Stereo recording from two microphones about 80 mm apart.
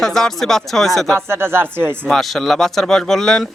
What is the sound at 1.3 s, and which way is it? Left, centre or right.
Speech, right.